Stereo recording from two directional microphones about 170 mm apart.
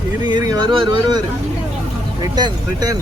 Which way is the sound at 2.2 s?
20° right (ahead or behind).